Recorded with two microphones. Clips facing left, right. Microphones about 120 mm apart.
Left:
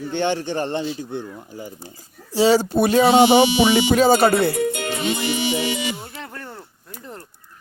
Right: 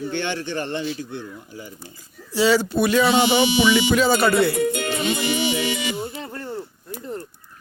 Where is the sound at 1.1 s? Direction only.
45° left (ahead or behind).